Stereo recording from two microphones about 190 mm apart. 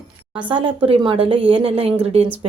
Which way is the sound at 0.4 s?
25° right (ahead or behind).